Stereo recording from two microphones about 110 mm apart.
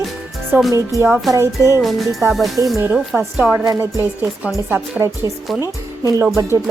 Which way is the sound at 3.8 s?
20° right (ahead or behind).